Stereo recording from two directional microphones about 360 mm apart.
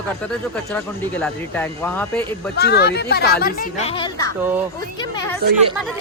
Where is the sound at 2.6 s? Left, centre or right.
Left; by 5.4 s centre.